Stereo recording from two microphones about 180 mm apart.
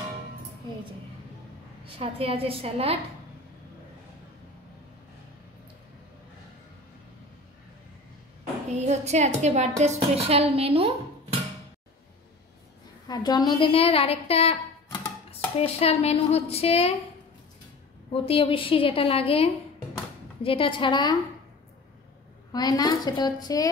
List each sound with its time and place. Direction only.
2.0 s a woman's voice: 30° right (ahead or behind)
8.7 s a woman's voice: 40° right (ahead or behind)
13.1 s a woman's voice: 20° left (ahead or behind)
18.1 s a woman's voice: 30° left (ahead or behind)
22.5 s a woman's voice: 20° left (ahead or behind)